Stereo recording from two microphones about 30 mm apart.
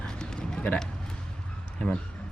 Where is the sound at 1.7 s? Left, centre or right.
Left.